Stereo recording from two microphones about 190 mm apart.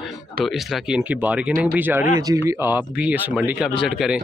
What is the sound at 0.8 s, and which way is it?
Speech, 5° right (ahead or behind).